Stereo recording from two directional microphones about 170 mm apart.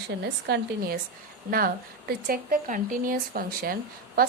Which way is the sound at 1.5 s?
60° right (ahead or behind).